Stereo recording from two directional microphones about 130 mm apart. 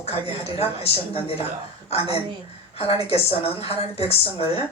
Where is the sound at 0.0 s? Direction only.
50° left (ahead or behind).